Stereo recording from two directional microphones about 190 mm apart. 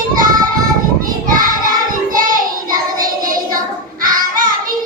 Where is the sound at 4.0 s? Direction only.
45° right (ahead or behind).